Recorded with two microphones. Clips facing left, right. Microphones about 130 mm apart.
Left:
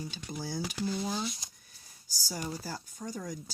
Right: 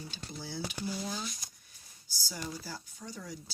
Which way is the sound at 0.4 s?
40° left (ahead or behind).